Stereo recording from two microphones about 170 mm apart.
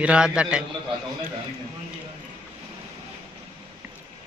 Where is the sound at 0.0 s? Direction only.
5° right (ahead or behind).